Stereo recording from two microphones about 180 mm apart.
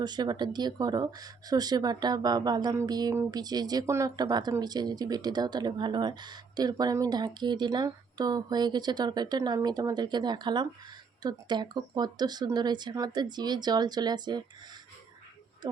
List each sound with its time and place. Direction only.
0.0 s speech: 25° right (ahead or behind)